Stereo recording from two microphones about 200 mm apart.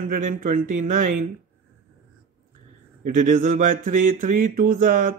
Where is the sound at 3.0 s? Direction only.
40° right (ahead or behind).